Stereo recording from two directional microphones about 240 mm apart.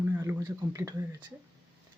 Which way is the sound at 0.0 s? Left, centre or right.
Centre.